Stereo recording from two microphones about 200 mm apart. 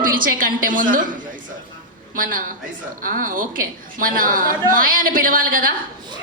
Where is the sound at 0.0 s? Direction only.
45° right (ahead or behind).